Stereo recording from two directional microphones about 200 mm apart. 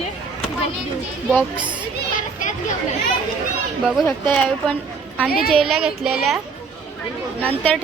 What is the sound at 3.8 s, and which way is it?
A woman's voice, centre (ahead or behind).